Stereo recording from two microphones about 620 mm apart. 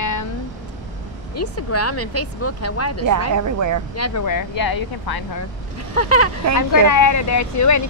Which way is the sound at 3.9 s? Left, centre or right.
Left.